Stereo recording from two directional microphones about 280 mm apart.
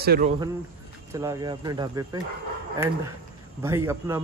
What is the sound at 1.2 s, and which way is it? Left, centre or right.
Speech, centre.